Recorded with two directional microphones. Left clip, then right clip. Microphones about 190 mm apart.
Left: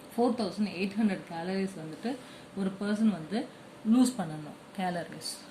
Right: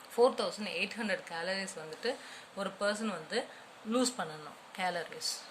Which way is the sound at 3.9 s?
15° right (ahead or behind).